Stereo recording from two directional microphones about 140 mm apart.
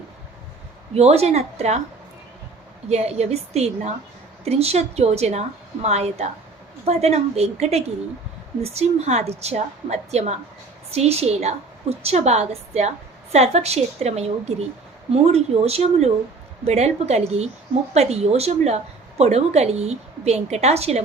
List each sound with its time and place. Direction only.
0.9 s a woman's voice: 50° right (ahead or behind)
2.9 s a woman's voice: 50° right (ahead or behind)